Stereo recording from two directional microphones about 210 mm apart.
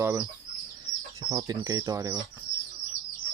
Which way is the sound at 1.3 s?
20° right (ahead or behind).